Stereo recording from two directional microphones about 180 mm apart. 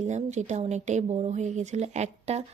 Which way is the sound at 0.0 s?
40° right (ahead or behind).